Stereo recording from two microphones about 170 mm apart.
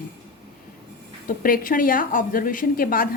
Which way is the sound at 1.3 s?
55° left (ahead or behind).